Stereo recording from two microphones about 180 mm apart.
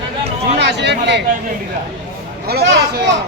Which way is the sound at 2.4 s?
65° right (ahead or behind).